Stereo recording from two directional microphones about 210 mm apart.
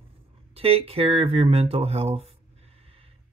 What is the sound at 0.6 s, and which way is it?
Speech, 30° right (ahead or behind).